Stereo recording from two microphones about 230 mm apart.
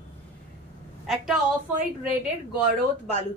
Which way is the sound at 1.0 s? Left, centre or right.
Centre.